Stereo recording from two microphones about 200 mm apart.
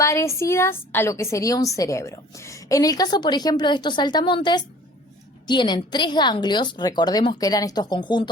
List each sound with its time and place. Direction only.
0.0 s a woman's voice: 15° left (ahead or behind)